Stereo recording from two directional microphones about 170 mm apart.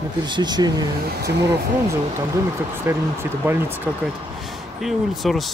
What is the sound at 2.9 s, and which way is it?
Speech, 15° right (ahead or behind).